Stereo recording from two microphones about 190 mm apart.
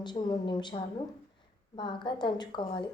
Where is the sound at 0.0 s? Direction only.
25° left (ahead or behind).